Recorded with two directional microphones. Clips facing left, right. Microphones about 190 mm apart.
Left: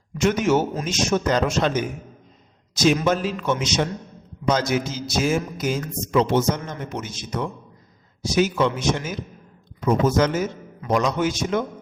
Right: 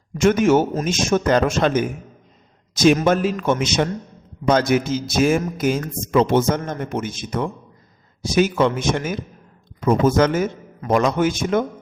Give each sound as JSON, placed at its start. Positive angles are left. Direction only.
{"t": 0.2, "sound": "a man's voice", "side_deg": -50}